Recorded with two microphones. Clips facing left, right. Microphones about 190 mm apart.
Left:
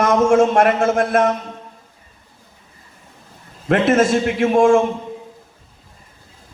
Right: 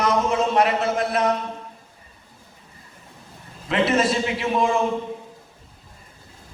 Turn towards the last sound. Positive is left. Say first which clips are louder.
# left 8 dB
turn(degrees=50)  # may be behind; listen again after turning